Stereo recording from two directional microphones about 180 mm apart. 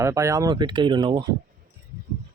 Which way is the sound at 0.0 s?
15° right (ahead or behind).